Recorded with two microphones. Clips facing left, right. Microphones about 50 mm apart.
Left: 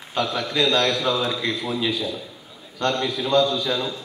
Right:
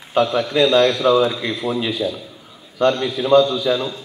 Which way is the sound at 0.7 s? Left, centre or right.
Centre.